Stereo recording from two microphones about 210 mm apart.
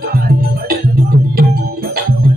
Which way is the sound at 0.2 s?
45° right (ahead or behind).